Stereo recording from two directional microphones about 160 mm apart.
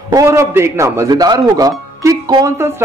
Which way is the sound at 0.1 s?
20° right (ahead or behind).